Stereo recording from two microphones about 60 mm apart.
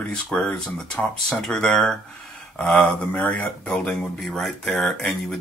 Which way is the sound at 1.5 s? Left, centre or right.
Centre.